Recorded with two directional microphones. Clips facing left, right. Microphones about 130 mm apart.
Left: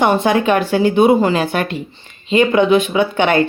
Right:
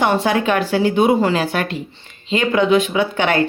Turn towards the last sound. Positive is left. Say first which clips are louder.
# left 3 dB
turn(degrees=20)  # may be behind; listen again after turning